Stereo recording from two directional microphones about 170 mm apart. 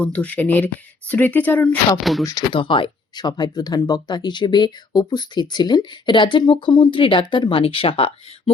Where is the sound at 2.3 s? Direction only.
25° left (ahead or behind).